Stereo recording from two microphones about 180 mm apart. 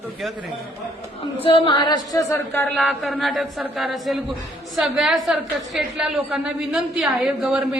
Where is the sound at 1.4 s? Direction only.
30° left (ahead or behind); by 2.8 s 10° left (ahead or behind).